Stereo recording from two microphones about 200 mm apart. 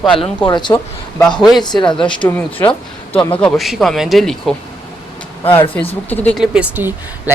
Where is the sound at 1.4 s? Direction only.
Centre (ahead or behind).